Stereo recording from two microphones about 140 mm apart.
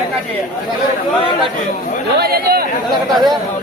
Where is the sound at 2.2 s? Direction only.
90° right.